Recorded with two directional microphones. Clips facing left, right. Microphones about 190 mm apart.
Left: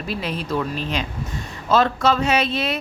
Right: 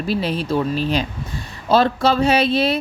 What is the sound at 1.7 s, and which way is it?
Speech, 30° right (ahead or behind).